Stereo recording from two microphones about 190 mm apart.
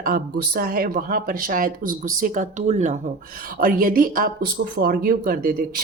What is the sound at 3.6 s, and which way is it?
A woman's voice, 50° right (ahead or behind).